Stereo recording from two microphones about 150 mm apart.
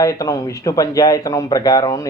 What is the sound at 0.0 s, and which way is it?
Speech, 25° left (ahead or behind).